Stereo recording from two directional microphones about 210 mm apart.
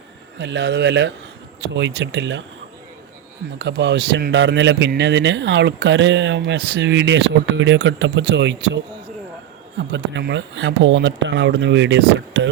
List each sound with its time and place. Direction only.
0.3 s speech: 60° right (ahead or behind)
3.6 s speech: 55° right (ahead or behind)